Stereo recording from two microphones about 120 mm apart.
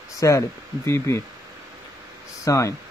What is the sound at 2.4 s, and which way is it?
Speech, 25° left (ahead or behind).